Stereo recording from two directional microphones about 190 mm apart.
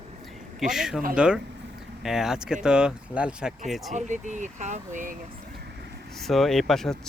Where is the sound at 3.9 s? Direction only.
40° right (ahead or behind).